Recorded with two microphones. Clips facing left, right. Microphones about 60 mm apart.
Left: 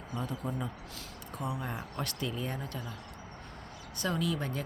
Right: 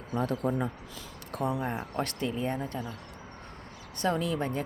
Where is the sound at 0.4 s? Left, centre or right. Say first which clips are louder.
Right 8 dB; right.